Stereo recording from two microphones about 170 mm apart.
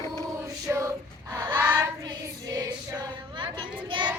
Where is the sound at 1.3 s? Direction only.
15° right (ahead or behind).